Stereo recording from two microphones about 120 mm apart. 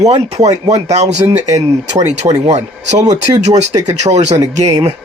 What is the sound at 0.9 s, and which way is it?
Speech, 65° right (ahead or behind).